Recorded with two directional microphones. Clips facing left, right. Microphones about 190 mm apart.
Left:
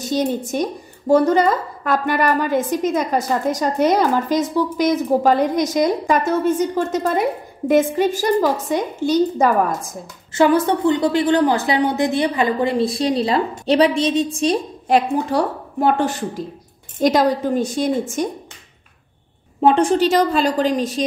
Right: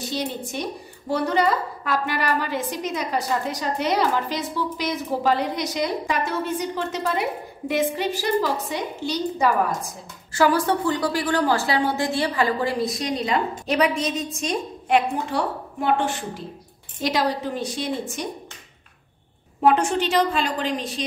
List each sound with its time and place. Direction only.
0.0 s a woman's voice: 45° left (ahead or behind)
10.3 s a woman's voice: 20° left (ahead or behind); by 18.3 s 45° left (ahead or behind)
19.6 s a woman's voice: 30° left (ahead or behind)